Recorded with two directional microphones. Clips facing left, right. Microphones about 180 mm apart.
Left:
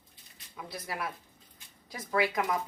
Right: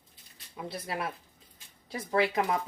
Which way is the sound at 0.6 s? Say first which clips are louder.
Right 3 dB; 30° right (ahead or behind).